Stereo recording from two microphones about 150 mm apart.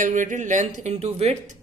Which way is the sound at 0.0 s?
55° right (ahead or behind).